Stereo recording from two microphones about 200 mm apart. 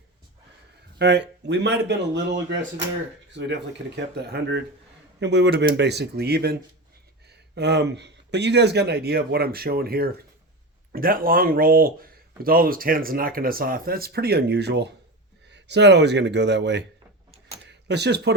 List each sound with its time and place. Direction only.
0.9 s speech: 55° right (ahead or behind)